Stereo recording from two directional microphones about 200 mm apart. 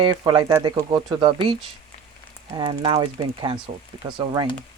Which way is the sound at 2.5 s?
25° right (ahead or behind).